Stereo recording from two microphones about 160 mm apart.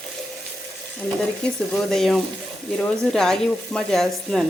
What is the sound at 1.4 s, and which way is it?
A woman's voice, 5° left (ahead or behind).